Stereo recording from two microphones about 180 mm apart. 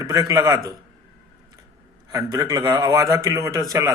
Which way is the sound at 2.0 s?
20° right (ahead or behind).